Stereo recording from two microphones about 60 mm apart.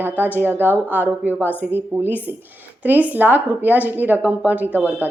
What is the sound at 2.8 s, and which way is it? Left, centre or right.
A woman's voice, right.